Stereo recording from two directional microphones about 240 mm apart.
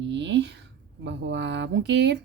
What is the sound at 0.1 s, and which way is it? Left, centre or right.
Speech, right.